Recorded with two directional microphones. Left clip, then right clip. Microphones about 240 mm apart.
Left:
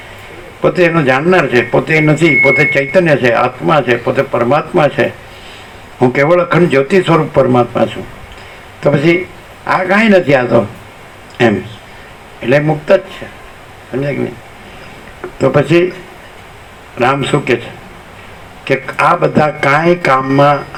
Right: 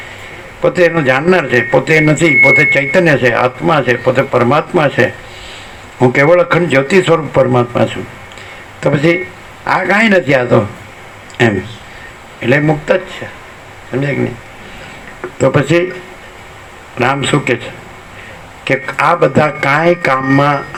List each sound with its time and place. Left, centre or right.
0.6 s speech: right
15.4 s speech: right
17.0 s speech: right